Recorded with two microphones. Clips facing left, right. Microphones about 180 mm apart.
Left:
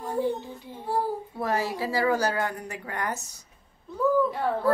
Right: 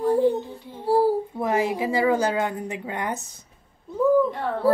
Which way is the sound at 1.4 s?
20° right (ahead or behind).